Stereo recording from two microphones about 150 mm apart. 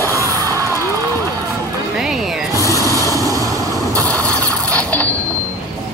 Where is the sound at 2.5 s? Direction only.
20° left (ahead or behind).